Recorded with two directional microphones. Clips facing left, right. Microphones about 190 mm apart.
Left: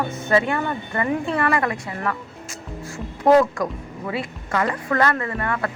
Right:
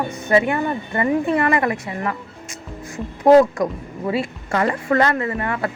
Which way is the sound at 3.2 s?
20° right (ahead or behind).